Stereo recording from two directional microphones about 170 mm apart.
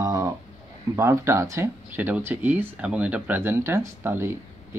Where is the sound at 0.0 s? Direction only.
20° right (ahead or behind).